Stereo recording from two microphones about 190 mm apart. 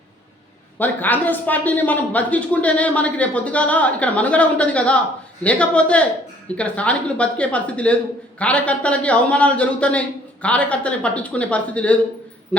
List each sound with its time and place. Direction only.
0.8 s a man's voice: 10° left (ahead or behind)